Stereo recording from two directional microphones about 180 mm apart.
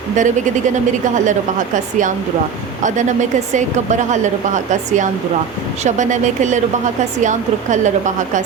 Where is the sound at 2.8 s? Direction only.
45° right (ahead or behind).